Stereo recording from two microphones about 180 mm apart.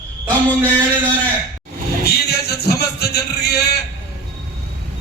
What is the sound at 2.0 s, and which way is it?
Music, 60° left (ahead or behind).